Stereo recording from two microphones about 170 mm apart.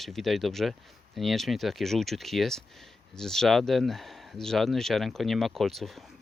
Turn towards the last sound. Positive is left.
turn(degrees=0)  # may be behind; listen again after turning